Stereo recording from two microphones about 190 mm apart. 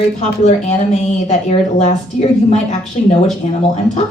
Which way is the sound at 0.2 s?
35° left (ahead or behind).